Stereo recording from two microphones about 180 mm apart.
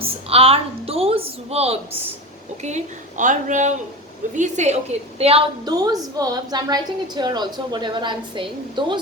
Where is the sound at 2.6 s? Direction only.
40° right (ahead or behind).